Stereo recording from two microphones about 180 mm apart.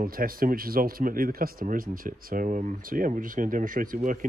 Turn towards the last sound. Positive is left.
turn(degrees=-50)  # may be behind; listen again after turning